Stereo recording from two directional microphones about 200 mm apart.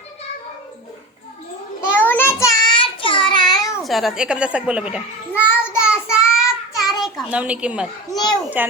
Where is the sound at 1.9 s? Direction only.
10° left (ahead or behind).